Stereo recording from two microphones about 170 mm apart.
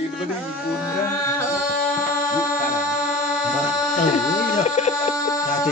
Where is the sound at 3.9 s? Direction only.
45° left (ahead or behind).